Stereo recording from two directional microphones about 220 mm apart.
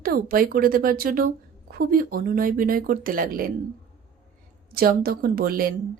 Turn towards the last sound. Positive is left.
turn(degrees=-40)  # may be behind; listen again after turning